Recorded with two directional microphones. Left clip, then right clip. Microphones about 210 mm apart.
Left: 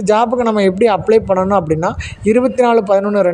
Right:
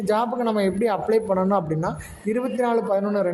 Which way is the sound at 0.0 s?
30° left (ahead or behind).